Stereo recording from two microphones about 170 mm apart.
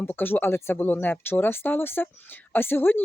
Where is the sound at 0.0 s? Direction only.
10° left (ahead or behind).